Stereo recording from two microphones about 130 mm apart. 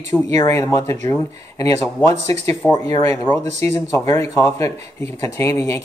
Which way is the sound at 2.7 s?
30° left (ahead or behind).